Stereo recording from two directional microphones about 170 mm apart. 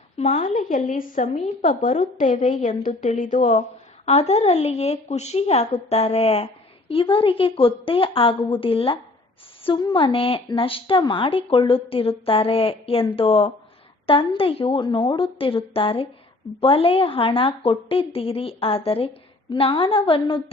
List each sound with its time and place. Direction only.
0.2 s a woman's voice: 40° left (ahead or behind)